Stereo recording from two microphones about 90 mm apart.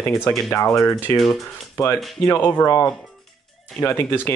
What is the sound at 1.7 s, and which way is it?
Speech, 25° left (ahead or behind).